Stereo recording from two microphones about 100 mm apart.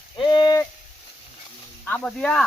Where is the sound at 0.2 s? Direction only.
50° left (ahead or behind).